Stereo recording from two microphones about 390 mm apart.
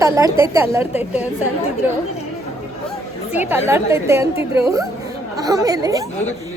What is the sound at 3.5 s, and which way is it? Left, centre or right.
A woman's voice, centre.